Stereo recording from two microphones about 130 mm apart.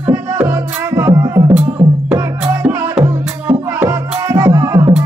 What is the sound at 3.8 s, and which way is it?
Music, 20° right (ahead or behind).